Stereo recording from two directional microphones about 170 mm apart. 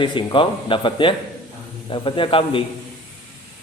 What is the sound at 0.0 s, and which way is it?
Speech, 30° left (ahead or behind).